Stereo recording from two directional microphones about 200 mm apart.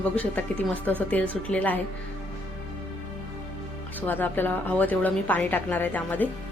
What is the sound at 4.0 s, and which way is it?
A woman's voice, 10° left (ahead or behind).